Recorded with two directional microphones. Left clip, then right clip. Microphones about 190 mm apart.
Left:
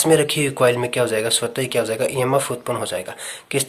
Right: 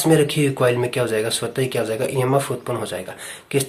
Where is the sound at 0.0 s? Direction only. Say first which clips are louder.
Left 1 dB; 30° left (ahead or behind).